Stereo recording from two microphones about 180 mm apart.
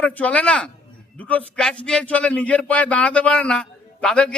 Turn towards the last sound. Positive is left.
turn(degrees=5)  # may be behind; listen again after turning